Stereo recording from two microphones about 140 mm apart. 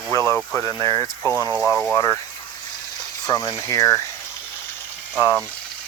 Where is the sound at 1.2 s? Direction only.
25° right (ahead or behind).